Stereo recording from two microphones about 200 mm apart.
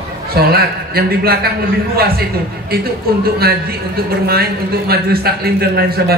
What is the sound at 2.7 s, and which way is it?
A man's voice, 50° right (ahead or behind).